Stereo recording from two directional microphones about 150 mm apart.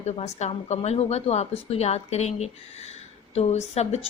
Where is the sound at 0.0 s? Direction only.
50° left (ahead or behind).